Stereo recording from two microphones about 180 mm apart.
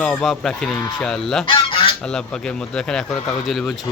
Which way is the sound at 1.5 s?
30° left (ahead or behind).